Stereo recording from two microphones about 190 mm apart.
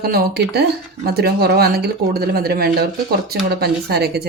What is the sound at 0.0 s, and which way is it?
Speech, 55° right (ahead or behind).